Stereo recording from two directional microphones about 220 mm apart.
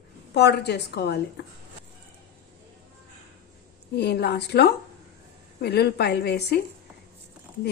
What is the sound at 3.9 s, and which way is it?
A woman's voice, 50° left (ahead or behind).